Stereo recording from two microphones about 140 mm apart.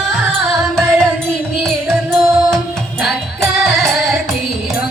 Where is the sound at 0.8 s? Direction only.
5° left (ahead or behind).